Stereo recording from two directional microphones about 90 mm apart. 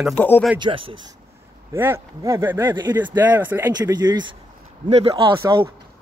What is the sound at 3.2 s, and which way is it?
Speech, 20° right (ahead or behind).